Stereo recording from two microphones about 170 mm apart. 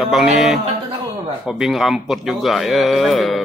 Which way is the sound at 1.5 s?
Centre (ahead or behind).